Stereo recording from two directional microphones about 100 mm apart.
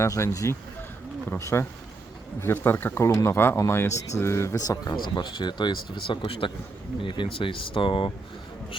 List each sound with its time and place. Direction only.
0.0 s speech: 30° left (ahead or behind); by 8.1 s 60° left (ahead or behind)